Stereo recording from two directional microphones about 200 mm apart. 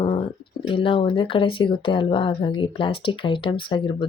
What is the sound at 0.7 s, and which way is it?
Speech, 25° left (ahead or behind).